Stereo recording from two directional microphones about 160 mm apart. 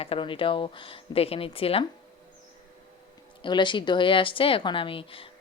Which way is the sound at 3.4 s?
30° left (ahead or behind).